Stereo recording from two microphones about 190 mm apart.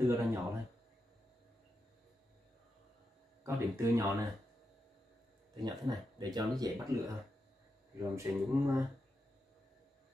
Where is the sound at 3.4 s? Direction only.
15° right (ahead or behind).